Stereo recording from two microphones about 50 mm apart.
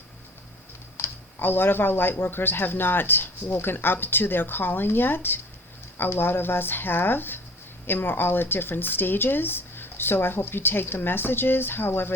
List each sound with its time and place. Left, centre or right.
0.9 s speech: left